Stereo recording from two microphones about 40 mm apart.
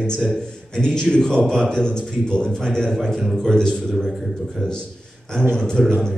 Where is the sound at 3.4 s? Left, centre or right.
Centre.